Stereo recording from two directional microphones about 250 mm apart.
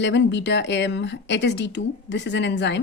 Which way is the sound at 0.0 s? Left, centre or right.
Left.